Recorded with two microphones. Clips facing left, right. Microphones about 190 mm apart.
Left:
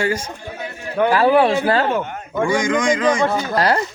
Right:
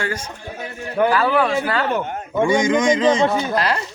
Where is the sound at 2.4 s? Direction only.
20° right (ahead or behind).